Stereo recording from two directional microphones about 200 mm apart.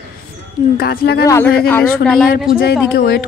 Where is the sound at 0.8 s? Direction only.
50° left (ahead or behind).